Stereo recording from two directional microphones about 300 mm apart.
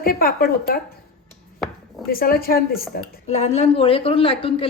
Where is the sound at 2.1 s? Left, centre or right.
Left.